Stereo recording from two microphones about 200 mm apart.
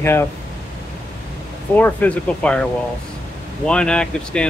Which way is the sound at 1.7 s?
10° left (ahead or behind).